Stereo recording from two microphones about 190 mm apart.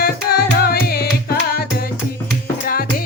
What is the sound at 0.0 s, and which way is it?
Music, 55° left (ahead or behind).